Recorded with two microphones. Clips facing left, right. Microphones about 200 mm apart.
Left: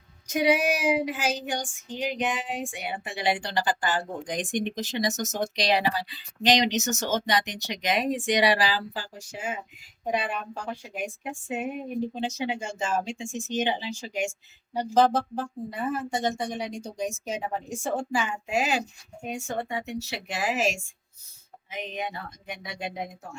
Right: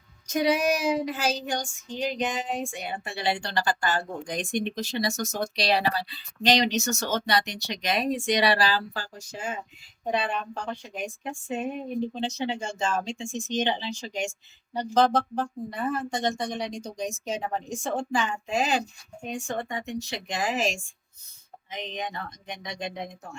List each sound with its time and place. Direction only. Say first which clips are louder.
0.3 s speech: left 1 dB; 10° left (ahead or behind)
0.6 s a sound: right 2 dB; 40° right (ahead or behind)
0.9 s speech: even; 10° left (ahead or behind)
2.2 s a sound: right 1 dB; 40° right (ahead or behind)
2.6 s speech: right 1 dB; 15° left (ahead or behind)
10.1 s speech: right 1 dB; 10° left (ahead or behind)